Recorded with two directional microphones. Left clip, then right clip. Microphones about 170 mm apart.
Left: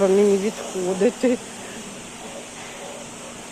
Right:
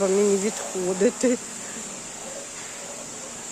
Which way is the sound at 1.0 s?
35° right (ahead or behind).